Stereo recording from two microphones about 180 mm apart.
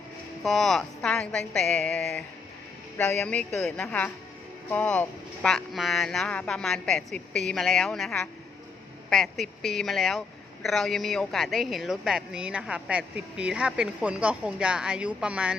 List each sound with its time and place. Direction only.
0.4 s a man's voice: centre (ahead or behind)